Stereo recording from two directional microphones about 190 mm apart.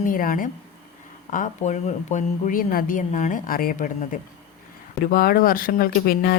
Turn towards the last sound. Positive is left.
turn(degrees=50)  # may be behind; listen again after turning